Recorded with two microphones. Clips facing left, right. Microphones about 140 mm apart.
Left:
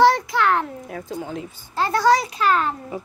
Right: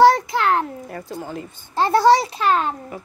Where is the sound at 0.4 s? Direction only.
30° right (ahead or behind).